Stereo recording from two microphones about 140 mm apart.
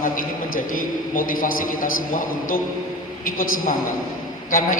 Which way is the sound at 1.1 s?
80° left.